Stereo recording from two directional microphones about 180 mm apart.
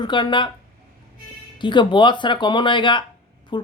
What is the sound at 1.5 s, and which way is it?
Speech, 25° left (ahead or behind).